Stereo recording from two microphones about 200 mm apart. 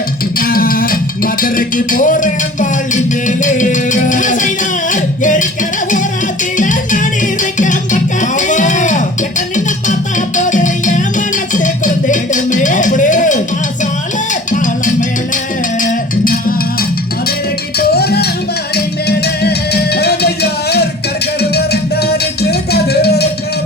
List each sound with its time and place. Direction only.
0.3 s music: 45° left (ahead or behind)
6.6 s music: 40° left (ahead or behind)
11.5 s a sound: 40° left (ahead or behind)
14.5 s music: 40° left (ahead or behind)
17.7 s music: 50° left (ahead or behind)